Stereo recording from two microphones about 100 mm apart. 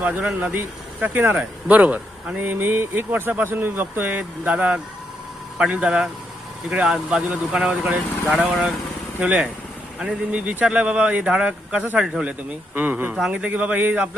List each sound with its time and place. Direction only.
0.0 s speech: 15° right (ahead or behind)
8.3 s speech: centre (ahead or behind)
9.1 s speech: 15° right (ahead or behind)